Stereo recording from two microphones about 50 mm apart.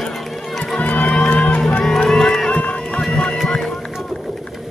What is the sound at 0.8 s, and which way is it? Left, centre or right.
Music, left.